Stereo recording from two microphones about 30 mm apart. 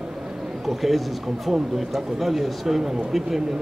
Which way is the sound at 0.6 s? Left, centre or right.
Centre.